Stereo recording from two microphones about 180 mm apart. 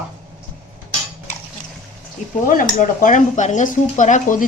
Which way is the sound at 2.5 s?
50° left (ahead or behind).